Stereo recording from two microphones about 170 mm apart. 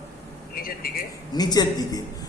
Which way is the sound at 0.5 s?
60° left (ahead or behind).